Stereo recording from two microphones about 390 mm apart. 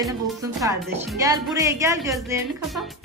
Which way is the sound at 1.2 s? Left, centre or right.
Centre.